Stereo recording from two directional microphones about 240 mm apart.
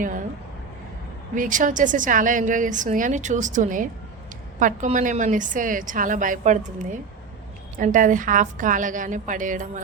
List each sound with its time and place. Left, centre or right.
1.4 s a woman's voice: right